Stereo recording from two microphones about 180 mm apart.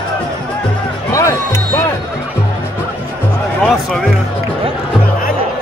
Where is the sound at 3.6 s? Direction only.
5° left (ahead or behind).